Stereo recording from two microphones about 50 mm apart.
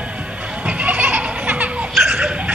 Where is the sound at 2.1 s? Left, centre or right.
Right.